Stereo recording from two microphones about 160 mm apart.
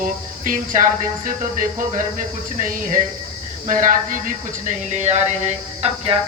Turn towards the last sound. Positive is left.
turn(degrees=-40)  # may be behind; listen again after turning